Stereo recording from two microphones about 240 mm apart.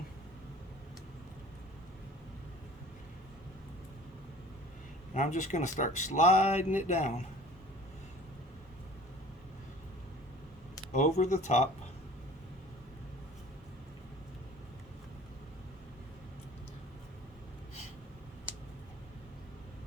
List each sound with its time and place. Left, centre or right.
5.1 s speech: left
10.9 s speech: left